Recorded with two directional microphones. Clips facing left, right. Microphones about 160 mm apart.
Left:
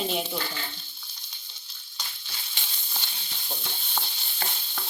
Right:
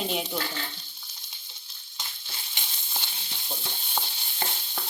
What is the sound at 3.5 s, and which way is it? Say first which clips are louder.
Stir: right 1 dB; 15° right (ahead or behind).